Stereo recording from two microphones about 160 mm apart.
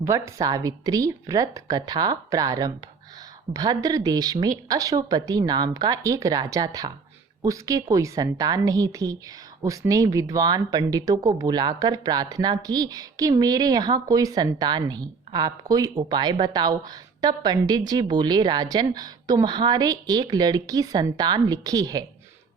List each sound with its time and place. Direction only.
0.0 s speech: 20° right (ahead or behind)